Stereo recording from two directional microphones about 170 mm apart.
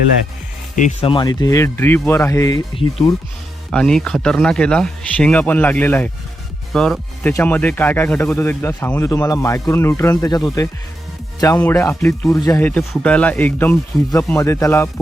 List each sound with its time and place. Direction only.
1.0 s speech: 25° left (ahead or behind)
3.7 s speech: 5° left (ahead or behind)